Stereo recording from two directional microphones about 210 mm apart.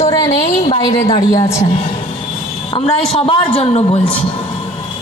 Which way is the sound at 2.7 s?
30° left (ahead or behind).